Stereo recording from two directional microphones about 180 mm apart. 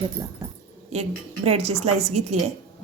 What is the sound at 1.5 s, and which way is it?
Speech, 35° right (ahead or behind).